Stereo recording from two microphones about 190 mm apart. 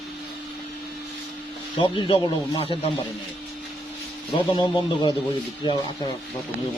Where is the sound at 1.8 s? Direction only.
25° left (ahead or behind).